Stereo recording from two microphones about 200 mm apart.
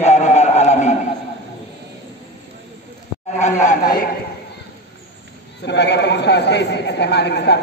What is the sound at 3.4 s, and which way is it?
Speech, 40° left (ahead or behind).